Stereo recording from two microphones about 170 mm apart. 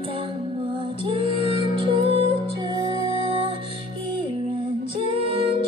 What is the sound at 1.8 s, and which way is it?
Music, 35° right (ahead or behind).